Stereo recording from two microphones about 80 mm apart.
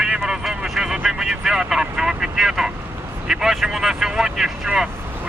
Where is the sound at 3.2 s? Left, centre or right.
Centre.